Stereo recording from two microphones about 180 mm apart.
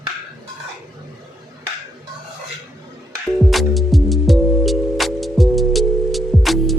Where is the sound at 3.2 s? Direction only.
Centre (ahead or behind).